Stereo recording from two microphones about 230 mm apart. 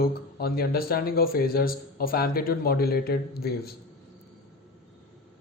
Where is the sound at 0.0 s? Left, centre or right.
Left.